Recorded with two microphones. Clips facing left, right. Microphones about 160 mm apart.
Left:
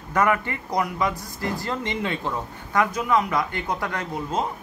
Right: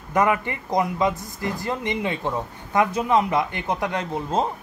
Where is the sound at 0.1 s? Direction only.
20° right (ahead or behind).